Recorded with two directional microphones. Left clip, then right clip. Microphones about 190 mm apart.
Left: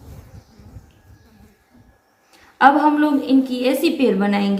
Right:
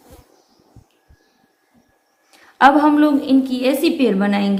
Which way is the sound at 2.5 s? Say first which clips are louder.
Right 1 dB; 40° right (ahead or behind).